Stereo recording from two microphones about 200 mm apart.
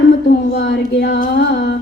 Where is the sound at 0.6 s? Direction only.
55° left (ahead or behind).